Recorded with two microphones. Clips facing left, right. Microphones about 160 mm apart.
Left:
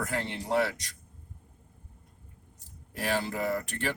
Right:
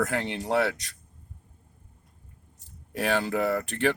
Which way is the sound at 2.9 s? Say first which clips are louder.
Right 5 dB; 75° right (ahead or behind).